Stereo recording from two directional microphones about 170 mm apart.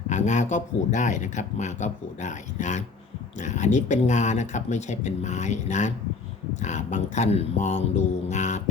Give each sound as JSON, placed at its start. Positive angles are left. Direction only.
{"t": 0.1, "sound": "speech", "side_deg": 45}